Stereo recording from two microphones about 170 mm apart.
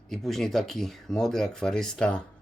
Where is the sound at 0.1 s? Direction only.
Centre (ahead or behind).